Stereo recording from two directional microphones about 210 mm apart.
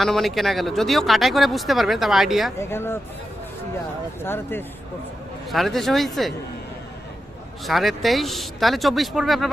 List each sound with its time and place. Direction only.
0.0 s speech: centre (ahead or behind)
2.6 s speech: 10° left (ahead or behind)
4.2 s speech: 10° left (ahead or behind)
5.5 s speech: centre (ahead or behind)
7.6 s speech: centre (ahead or behind)